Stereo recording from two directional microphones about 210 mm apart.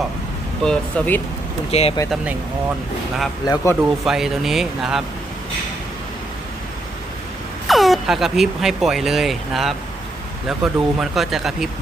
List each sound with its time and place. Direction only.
0.6 s speech: 5° left (ahead or behind)
1.7 s speech: 30° left (ahead or behind)
3.4 s speech: 15° left (ahead or behind)
3.8 s speech: centre (ahead or behind)
7.7 s speech: centre (ahead or behind)